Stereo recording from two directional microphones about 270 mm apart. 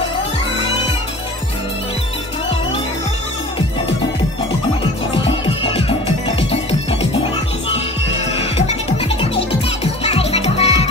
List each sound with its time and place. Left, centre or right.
5.4 s music: centre
8.5 s music: left
10.0 s music: left